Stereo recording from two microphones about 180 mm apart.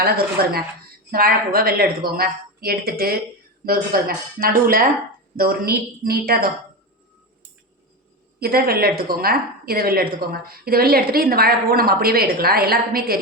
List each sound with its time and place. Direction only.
0.4 s a woman's voice: 60° right (ahead or behind)
8.4 s a woman's voice: 55° right (ahead or behind)